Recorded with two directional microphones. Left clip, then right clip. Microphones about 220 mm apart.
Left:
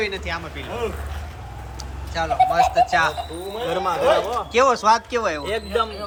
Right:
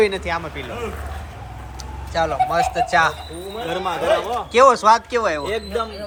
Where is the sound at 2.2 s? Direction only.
5° left (ahead or behind).